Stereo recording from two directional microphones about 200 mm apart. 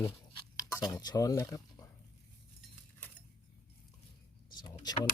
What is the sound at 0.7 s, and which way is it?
Speech, 20° left (ahead or behind).